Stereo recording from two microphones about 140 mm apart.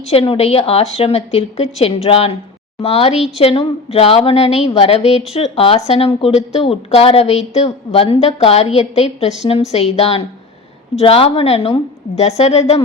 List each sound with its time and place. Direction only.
0.1 s speech: 45° left (ahead or behind)